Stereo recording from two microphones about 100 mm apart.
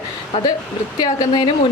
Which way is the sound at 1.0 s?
50° left (ahead or behind).